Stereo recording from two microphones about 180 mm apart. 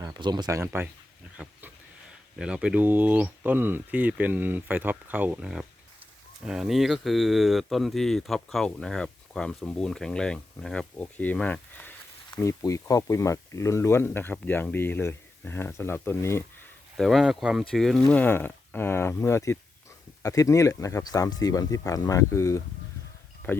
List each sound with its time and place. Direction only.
0.0 s speech: 25° right (ahead or behind); by 16.4 s 15° left (ahead or behind)
17.0 s speech: centre (ahead or behind)